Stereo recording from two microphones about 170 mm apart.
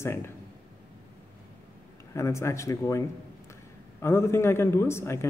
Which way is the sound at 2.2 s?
15° left (ahead or behind).